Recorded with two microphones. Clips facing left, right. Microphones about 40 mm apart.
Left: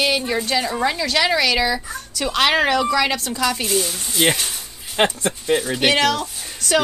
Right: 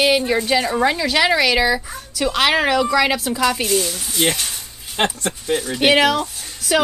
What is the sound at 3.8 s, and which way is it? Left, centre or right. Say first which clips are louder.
Speech: left 1 dB; centre.